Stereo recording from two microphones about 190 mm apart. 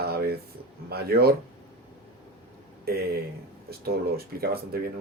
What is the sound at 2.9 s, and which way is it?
Speech, 55° right (ahead or behind).